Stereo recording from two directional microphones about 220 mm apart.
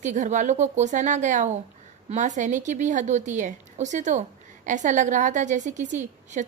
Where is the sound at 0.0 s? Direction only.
35° right (ahead or behind).